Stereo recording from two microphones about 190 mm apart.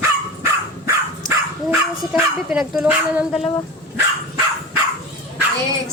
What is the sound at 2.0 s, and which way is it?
Speech, 5° right (ahead or behind).